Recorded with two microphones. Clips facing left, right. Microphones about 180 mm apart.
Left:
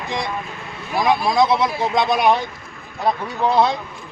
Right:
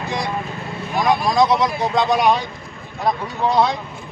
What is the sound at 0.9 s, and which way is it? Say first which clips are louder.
Speech: even; 10° left (ahead or behind).